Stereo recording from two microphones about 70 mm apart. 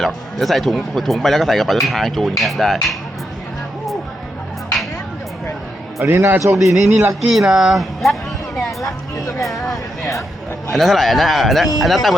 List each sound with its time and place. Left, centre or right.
0.0 s speech: centre
6.0 s a man's voice: right
6.6 s speech: centre
8.9 s a sound: left
9.4 s a sound: centre
10.7 s speech: centre